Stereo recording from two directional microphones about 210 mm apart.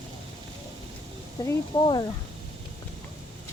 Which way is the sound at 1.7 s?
20° left (ahead or behind).